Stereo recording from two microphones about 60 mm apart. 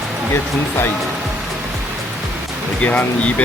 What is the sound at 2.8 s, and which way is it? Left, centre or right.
Speech, left.